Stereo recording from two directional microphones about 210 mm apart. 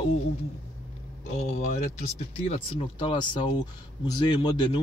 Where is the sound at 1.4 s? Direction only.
35° left (ahead or behind).